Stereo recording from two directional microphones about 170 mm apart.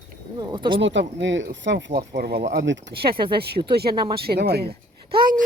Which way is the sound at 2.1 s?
65° right (ahead or behind).